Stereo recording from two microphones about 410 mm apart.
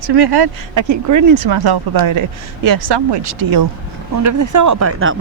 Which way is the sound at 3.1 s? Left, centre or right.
Right.